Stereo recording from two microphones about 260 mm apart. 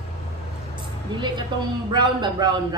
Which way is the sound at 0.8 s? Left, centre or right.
Centre.